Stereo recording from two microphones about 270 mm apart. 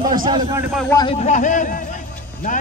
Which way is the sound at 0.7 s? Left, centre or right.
Centre.